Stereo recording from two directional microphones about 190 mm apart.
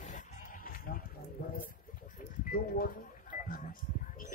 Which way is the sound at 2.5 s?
50° left (ahead or behind).